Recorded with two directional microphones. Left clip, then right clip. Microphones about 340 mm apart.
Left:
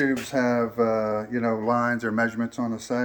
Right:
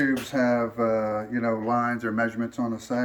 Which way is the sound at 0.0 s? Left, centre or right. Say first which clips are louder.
Even; centre.